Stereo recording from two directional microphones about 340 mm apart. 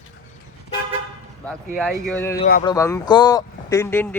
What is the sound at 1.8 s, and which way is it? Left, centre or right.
Speech, centre.